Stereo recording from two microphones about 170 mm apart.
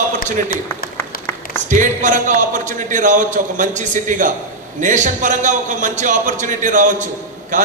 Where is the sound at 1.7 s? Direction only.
50° right (ahead or behind).